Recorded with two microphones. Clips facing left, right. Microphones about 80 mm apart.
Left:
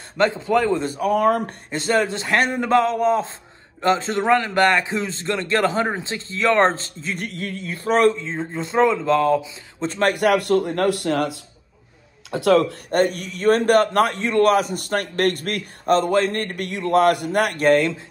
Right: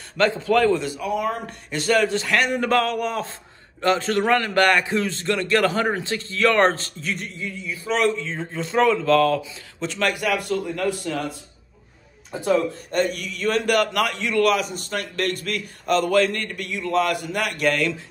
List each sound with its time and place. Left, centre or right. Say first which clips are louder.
0.2 s a man's voice: even; left
0.7 s speech: left 4 dB; left
1.7 s a man's voice: right 1 dB; left
7.2 s a man's voice: left 3 dB; left
8.0 s a man's voice: left 4 dB; left
10.1 s a man's voice: left 6 dB; left
12.3 s speech: left 5 dB; left
12.9 s a man's voice: left 4 dB; left